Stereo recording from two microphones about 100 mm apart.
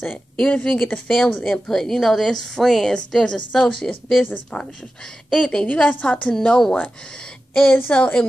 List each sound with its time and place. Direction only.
0.0 s a woman's voice: 15° left (ahead or behind)
1.4 s a woman's voice: centre (ahead or behind)
7.5 s a woman's voice: 20° left (ahead or behind)